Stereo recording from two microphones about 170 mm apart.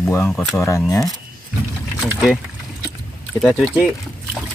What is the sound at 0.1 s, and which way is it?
Speech, 10° left (ahead or behind).